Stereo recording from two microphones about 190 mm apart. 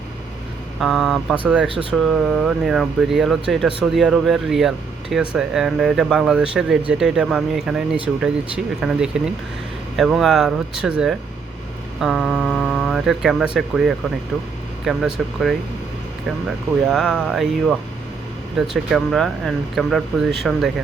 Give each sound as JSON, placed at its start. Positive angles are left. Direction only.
{"t": 0.8, "sound": "speech", "side_deg": 0}
{"t": 16.8, "sound": "speech", "side_deg": 0}